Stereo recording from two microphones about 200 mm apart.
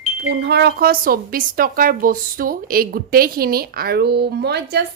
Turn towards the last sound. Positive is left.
turn(degrees=-55)  # may be behind; listen again after turning